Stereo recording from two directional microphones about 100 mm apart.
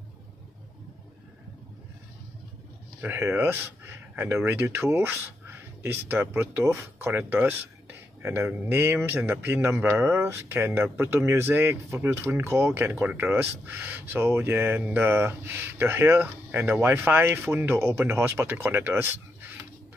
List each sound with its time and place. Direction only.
3.0 s speech: 20° right (ahead or behind)